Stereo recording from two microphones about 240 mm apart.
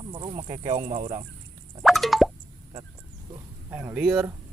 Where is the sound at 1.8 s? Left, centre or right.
Centre.